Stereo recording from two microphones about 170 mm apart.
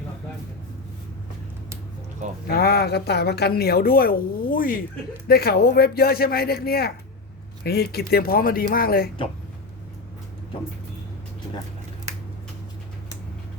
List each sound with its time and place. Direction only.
2.5 s a woman's voice: 65° left (ahead or behind)